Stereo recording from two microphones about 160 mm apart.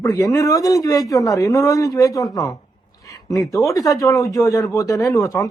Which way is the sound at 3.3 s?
20° left (ahead or behind).